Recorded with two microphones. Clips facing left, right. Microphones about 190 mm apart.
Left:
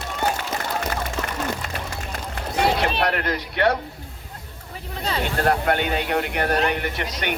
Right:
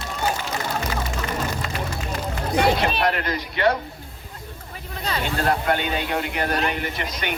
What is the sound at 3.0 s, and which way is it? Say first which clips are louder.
Speech: even; 65° left (ahead or behind).